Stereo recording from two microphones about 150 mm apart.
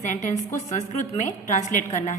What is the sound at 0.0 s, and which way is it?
A woman's voice, 55° left (ahead or behind).